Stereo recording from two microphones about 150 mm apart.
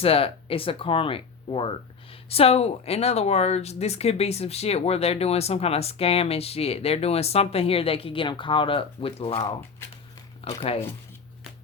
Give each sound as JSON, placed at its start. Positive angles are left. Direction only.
{"t": 0.0, "sound": "speech", "side_deg": 40}